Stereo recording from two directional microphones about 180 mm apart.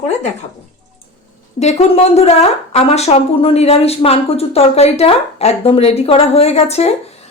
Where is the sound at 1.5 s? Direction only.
35° left (ahead or behind).